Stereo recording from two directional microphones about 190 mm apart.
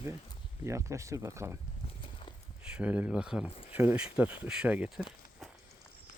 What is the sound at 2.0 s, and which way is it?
Walk, 30° left (ahead or behind).